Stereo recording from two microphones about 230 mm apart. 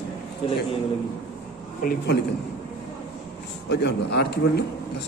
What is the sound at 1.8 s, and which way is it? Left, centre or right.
Speech, left.